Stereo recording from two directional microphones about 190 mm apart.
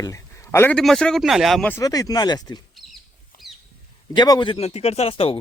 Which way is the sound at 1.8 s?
20° left (ahead or behind).